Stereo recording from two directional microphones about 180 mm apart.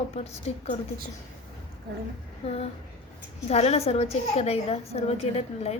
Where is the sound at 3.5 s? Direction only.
35° left (ahead or behind).